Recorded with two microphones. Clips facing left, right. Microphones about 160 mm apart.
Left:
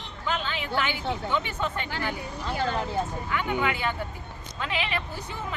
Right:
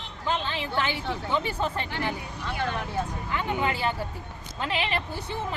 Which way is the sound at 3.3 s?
30° right (ahead or behind).